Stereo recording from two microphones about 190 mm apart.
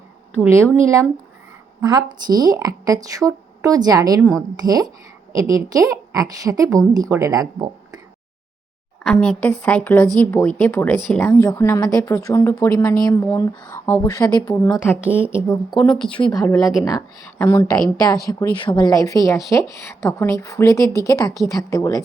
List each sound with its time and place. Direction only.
0.3 s a woman's voice: 10° right (ahead or behind)
4.2 s speech: centre (ahead or behind)
4.6 s a woman's voice: 20° right (ahead or behind)
9.2 s speech: 5° left (ahead or behind)
16.4 s speech: 20° left (ahead or behind)